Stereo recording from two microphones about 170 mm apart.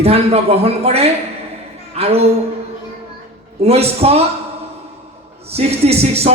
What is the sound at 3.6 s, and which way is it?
Speech, 35° right (ahead or behind).